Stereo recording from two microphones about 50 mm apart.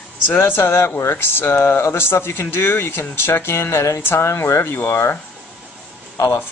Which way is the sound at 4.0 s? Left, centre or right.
Left.